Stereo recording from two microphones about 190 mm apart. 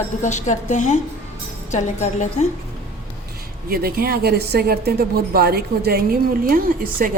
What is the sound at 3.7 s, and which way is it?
A woman's voice, 50° right (ahead or behind).